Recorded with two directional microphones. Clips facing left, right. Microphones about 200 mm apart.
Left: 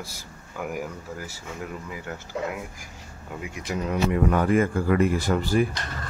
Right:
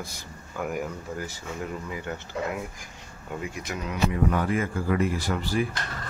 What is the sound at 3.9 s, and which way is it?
Speech, 50° left (ahead or behind).